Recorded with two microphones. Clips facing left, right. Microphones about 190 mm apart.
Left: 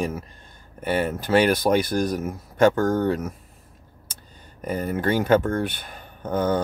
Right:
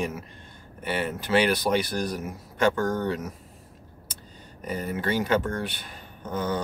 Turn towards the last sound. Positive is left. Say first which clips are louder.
# left 6 dB
turn(degrees=50)  # may be behind; listen again after turning